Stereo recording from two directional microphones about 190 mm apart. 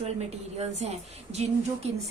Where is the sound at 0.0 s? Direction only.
35° right (ahead or behind).